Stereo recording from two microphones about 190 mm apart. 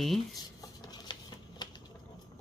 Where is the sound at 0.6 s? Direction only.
20° left (ahead or behind).